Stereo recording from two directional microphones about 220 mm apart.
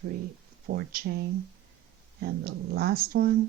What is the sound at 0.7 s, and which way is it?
Speech, 45° right (ahead or behind).